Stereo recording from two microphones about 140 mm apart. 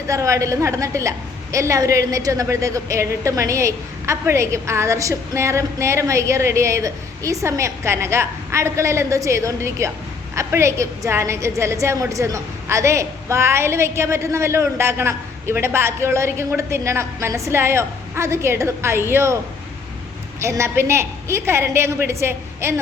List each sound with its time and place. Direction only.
0.1 s a woman's voice: 20° right (ahead or behind)
20.4 s a woman's voice: 20° right (ahead or behind)